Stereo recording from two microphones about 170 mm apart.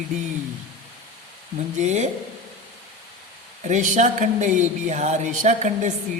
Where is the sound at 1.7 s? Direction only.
45° right (ahead or behind).